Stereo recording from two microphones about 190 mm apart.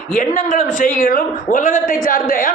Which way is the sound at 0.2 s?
40° left (ahead or behind).